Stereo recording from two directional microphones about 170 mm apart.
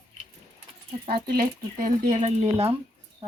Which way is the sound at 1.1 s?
60° right (ahead or behind).